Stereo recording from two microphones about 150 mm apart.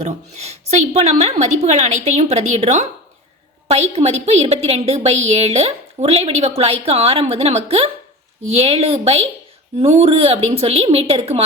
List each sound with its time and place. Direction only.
0.0 s a woman's voice: 45° right (ahead or behind)